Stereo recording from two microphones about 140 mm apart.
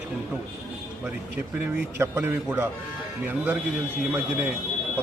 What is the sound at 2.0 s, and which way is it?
Speech, 15° right (ahead or behind).